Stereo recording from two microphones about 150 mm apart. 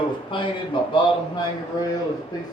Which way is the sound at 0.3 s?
35° left (ahead or behind).